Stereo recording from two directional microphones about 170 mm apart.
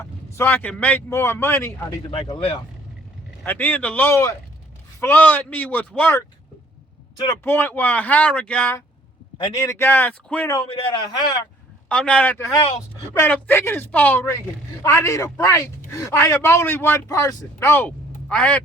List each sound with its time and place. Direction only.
0.3 s speech: 10° left (ahead or behind)
2.0 s speech: 30° left (ahead or behind)
3.4 s speech: 10° left (ahead or behind)
11.9 s speech: 5° left (ahead or behind)
12.5 s speech: 35° left (ahead or behind)
13.1 s speech: 10° left (ahead or behind)